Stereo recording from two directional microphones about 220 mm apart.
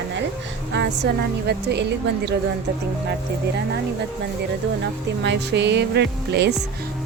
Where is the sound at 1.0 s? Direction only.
50° right (ahead or behind).